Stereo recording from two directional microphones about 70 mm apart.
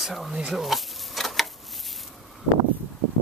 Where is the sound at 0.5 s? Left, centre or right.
Centre.